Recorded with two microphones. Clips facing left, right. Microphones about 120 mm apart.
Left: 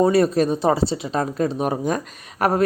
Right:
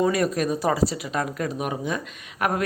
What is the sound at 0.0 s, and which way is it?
A woman's voice, 30° left (ahead or behind).